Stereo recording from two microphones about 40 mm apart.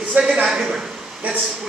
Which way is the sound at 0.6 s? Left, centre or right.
Centre.